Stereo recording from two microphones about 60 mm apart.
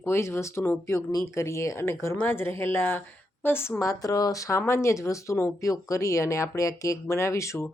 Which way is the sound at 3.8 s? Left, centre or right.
Left.